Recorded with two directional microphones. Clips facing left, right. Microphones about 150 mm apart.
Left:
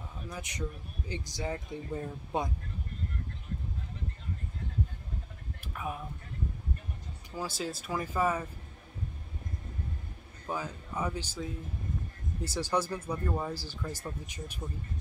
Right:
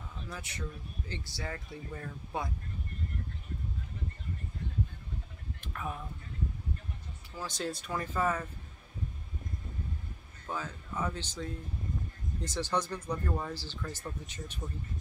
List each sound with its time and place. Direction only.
0.3 s speech: 15° left (ahead or behind)
5.6 s a sound: 10° left (ahead or behind)
7.3 s speech: 5° left (ahead or behind)
10.4 s speech: 15° left (ahead or behind)